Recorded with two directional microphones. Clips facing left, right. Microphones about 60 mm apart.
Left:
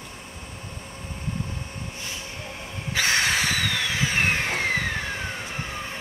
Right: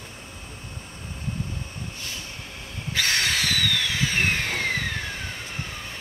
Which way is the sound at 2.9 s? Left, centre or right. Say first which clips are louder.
Left 2 dB; centre.